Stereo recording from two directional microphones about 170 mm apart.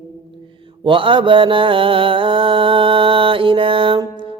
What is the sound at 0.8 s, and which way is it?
Mantra, 30° right (ahead or behind).